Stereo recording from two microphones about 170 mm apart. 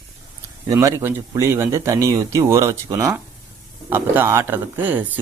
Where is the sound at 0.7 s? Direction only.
15° right (ahead or behind).